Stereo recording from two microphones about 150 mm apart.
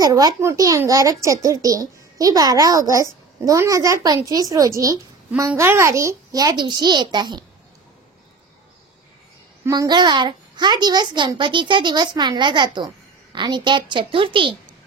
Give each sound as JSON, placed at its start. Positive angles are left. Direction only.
{"t": 0.0, "sound": "speech", "side_deg": -25}
{"t": 9.7, "sound": "a child's voice", "side_deg": -25}